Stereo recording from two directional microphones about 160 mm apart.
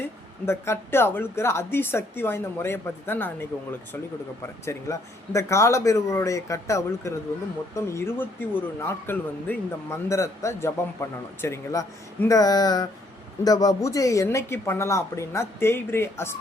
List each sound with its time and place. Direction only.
0.4 s speech: 15° left (ahead or behind)